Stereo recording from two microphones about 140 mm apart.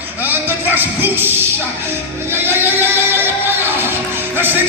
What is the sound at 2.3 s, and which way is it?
Music, 15° right (ahead or behind).